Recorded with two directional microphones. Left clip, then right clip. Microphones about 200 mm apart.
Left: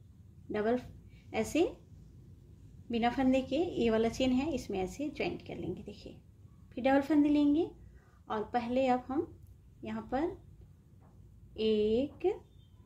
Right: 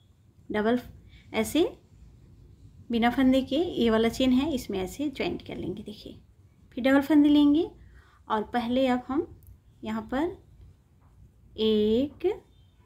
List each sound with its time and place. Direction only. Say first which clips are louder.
0.5 s a woman's voice: right 5 dB; 20° right (ahead or behind)
2.9 s a woman's voice: right 6 dB; 20° right (ahead or behind)
11.5 s a woman's voice: right 5 dB; 20° right (ahead or behind)